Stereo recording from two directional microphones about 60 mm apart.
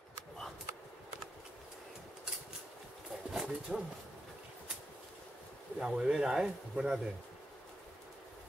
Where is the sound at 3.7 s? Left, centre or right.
Centre.